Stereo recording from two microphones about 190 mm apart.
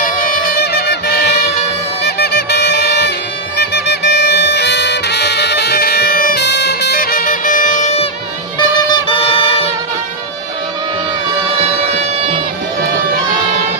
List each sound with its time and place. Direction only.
0.0 s music: 50° left (ahead or behind)
8.5 s music: 25° left (ahead or behind)
11.9 s music: 35° right (ahead or behind)